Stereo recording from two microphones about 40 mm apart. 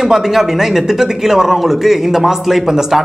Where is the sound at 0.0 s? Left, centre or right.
Centre.